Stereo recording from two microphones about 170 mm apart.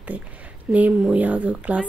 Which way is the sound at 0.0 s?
10° right (ahead or behind).